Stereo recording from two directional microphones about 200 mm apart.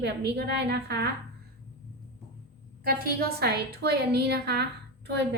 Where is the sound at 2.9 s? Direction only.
50° right (ahead or behind).